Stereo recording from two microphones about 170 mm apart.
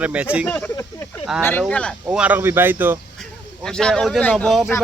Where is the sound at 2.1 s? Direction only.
10° right (ahead or behind).